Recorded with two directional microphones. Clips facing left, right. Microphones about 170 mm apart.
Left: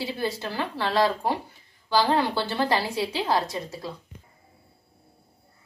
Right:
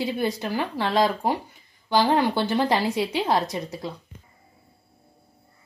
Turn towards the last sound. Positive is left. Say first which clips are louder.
# right 2 dB
turn(degrees=-20)  # may be behind; listen again after turning